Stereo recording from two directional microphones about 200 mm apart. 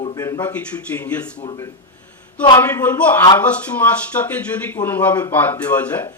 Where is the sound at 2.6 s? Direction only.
10° left (ahead or behind).